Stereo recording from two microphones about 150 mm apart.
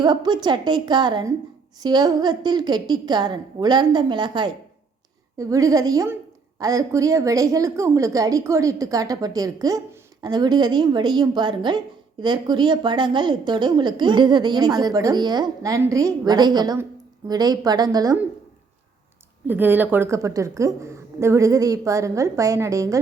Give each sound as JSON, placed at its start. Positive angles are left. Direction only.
{"t": 0.0, "sound": "a woman's voice", "side_deg": -30}
{"t": 19.5, "sound": "a woman's voice", "side_deg": -10}